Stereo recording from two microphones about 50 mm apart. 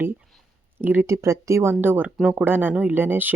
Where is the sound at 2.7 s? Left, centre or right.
Right.